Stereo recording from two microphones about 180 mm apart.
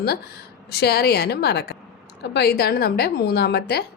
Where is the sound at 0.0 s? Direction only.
65° left (ahead or behind).